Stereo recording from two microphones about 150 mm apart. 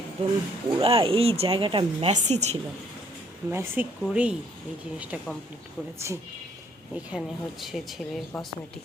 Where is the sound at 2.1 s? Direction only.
50° right (ahead or behind).